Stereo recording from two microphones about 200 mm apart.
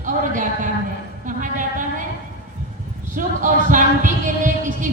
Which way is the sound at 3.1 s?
40° right (ahead or behind).